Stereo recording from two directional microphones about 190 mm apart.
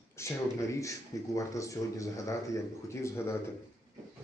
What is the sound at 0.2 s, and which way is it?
Speech, 15° left (ahead or behind).